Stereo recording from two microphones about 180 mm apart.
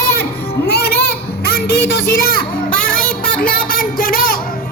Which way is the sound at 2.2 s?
55° left (ahead or behind).